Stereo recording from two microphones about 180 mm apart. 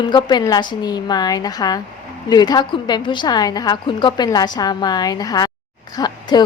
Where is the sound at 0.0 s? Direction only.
25° left (ahead or behind).